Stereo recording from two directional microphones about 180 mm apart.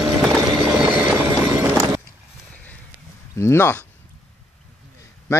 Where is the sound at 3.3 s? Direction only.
15° left (ahead or behind).